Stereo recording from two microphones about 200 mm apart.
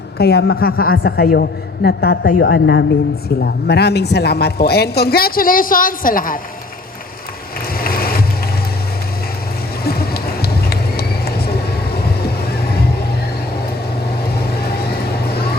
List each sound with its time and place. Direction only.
0.2 s a woman's voice: 55° left (ahead or behind)
2.5 s a woman's voice: 60° left (ahead or behind); by 6.4 s 45° left (ahead or behind)
7.7 s a sound: 50° left (ahead or behind)
9.8 s run: 50° left (ahead or behind)